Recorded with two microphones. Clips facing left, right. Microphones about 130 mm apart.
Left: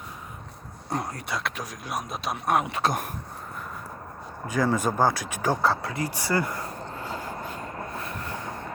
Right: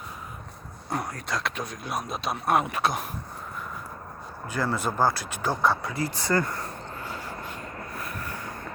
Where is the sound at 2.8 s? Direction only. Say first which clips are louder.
Left 1 dB; 50° left (ahead or behind).